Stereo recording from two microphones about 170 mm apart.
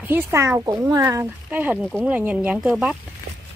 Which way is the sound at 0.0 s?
10° right (ahead or behind).